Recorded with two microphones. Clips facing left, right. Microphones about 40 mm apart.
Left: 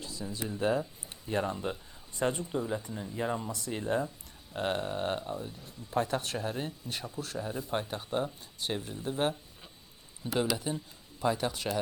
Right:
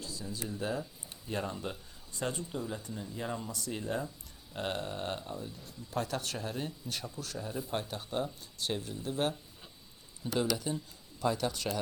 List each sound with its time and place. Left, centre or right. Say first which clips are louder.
0.0 s speech: left 3 dB; left
2.9 s speech: left 4 dB; centre
3.7 s speech: left 5 dB; left
4.5 s speech: left 4 dB; centre
10.3 s speech: left 1 dB; left